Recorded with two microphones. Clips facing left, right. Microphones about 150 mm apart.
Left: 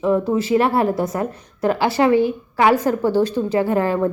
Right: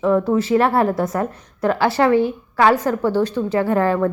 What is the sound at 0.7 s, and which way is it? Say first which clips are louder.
Speech: right 1 dB; 15° left (ahead or behind).